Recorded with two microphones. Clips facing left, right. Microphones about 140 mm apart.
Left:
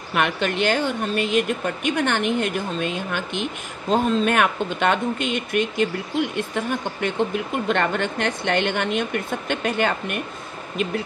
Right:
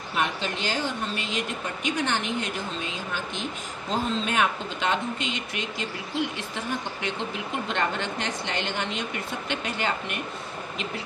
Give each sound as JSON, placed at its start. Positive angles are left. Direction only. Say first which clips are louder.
{"t": 0.1, "sound": "speech", "louder": "left 6 dB", "side_deg": 65}